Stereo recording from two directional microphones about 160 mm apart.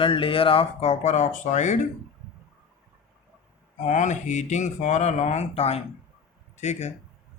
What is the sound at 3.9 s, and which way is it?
Speech, 50° left (ahead or behind).